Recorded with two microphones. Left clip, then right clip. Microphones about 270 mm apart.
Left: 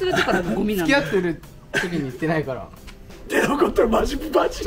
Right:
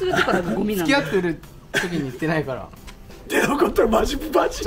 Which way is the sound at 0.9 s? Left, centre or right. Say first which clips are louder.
Even; centre.